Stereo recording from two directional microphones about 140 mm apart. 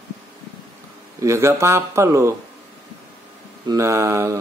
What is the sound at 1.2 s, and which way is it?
Mantra, 20° right (ahead or behind).